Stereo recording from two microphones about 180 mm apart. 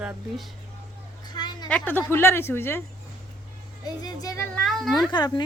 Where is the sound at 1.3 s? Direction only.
25° left (ahead or behind).